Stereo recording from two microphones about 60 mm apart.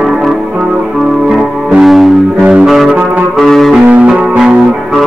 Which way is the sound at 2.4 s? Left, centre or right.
Centre.